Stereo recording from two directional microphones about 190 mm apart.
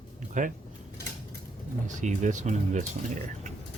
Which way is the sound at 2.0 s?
40° right (ahead or behind).